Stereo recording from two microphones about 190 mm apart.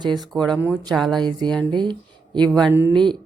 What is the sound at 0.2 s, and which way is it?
Speech, 5° left (ahead or behind).